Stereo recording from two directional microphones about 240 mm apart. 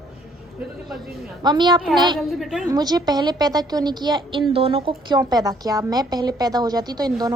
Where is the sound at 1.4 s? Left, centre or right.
Centre.